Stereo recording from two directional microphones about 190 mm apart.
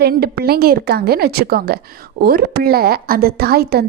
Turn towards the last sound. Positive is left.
turn(degrees=-55)  # may be behind; listen again after turning